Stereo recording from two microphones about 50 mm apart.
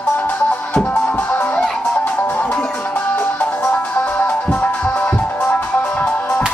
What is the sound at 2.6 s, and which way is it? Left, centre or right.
Music, left.